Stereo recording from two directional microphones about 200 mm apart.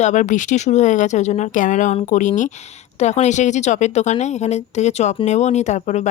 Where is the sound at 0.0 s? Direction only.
40° left (ahead or behind).